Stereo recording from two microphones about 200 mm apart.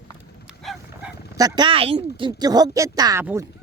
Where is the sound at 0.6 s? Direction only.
Centre (ahead or behind).